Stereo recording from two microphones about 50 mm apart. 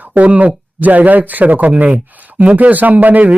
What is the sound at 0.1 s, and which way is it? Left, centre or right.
Speech, right.